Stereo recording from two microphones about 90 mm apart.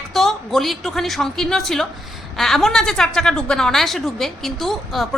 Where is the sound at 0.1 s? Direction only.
Centre (ahead or behind).